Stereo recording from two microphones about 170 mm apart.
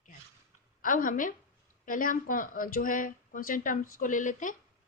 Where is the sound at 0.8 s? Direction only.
55° left (ahead or behind).